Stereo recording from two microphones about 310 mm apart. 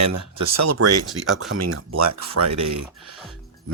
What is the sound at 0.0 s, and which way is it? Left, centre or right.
Speech, right.